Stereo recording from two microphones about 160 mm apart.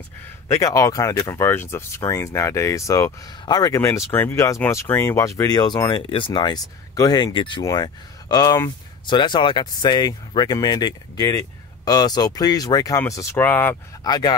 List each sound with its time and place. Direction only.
0.5 s speech: 20° left (ahead or behind)
14.0 s speech: 25° left (ahead or behind)